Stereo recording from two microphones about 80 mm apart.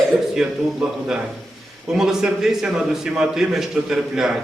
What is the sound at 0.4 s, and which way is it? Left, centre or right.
Speech, centre.